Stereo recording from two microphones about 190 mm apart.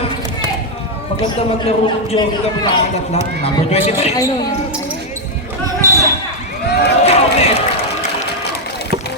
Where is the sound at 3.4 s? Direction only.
35° left (ahead or behind).